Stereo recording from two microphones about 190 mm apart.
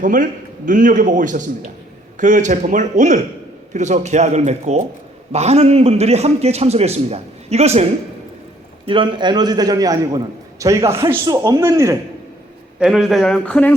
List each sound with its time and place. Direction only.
0.0 s a man's voice: 45° right (ahead or behind)
8.9 s a man's voice: 25° right (ahead or behind)
12.8 s speech: centre (ahead or behind)